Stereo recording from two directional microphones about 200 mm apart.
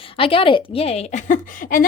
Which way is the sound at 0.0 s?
25° left (ahead or behind).